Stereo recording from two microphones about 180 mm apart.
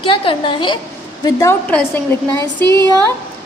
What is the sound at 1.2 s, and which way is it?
A woman's voice, 15° left (ahead or behind).